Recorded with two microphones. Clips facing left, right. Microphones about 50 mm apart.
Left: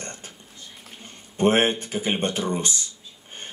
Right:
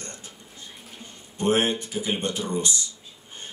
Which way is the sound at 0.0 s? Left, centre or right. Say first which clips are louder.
Left 3 dB; left.